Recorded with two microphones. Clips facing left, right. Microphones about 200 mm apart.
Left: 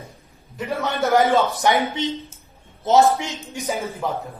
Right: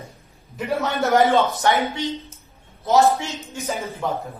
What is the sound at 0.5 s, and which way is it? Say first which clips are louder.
A man's voice: right 1 dB; centre (ahead or behind).